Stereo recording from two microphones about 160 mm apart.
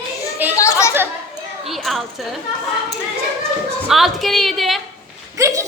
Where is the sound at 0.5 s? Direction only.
20° left (ahead or behind).